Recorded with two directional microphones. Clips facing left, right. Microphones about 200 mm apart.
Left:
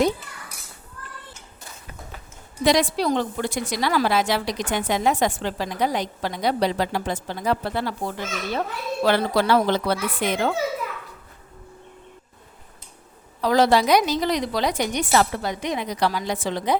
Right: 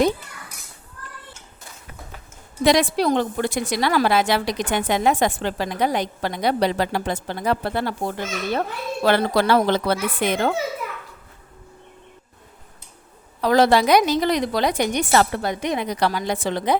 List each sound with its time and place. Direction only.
2.6 s a woman's voice: 60° right (ahead or behind)
13.4 s a woman's voice: 60° right (ahead or behind)